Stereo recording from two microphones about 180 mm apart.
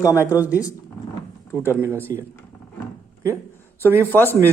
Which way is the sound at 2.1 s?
20° right (ahead or behind).